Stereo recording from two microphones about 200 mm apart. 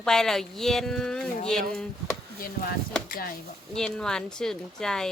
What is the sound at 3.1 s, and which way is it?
Speech, 45° left (ahead or behind).